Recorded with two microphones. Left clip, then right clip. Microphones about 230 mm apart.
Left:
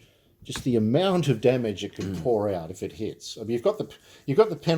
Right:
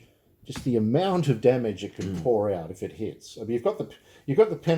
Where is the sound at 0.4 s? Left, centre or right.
Left.